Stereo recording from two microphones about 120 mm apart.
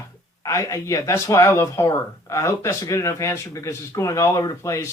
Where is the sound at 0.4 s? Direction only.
25° left (ahead or behind).